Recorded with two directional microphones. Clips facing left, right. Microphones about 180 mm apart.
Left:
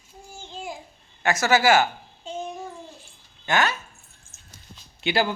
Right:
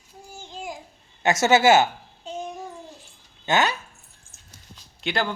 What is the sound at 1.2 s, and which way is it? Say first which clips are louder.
Speech: right 2 dB; 20° right (ahead or behind).